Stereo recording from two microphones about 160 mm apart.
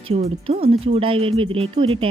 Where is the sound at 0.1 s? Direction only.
40° right (ahead or behind).